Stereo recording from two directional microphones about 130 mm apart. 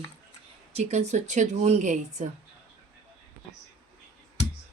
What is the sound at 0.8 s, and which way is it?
Speech, 60° right (ahead or behind).